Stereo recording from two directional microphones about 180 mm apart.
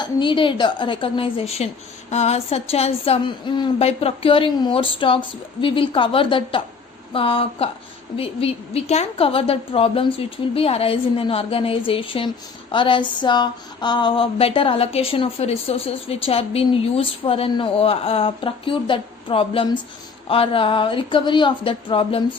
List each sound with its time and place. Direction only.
0.0 s a woman's voice: 25° left (ahead or behind)
7.1 s a sound: 30° left (ahead or behind)
20.2 s a woman's voice: 30° left (ahead or behind)